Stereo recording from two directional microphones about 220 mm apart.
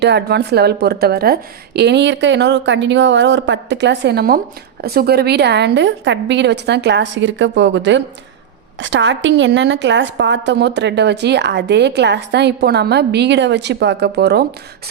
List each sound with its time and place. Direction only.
0.0 s a woman's voice: 50° right (ahead or behind)